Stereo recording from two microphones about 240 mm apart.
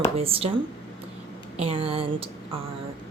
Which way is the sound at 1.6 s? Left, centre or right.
Right.